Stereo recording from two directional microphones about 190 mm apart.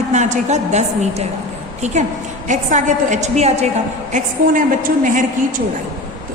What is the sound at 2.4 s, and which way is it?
A woman's voice, 40° right (ahead or behind).